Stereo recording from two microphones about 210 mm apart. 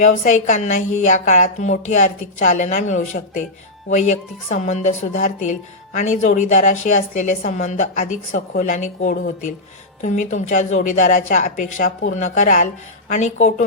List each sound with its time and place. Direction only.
0.0 s speech: 35° left (ahead or behind)